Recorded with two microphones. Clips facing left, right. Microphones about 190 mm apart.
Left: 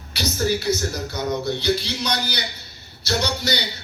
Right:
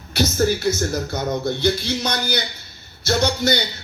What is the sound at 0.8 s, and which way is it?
Speech, 50° right (ahead or behind).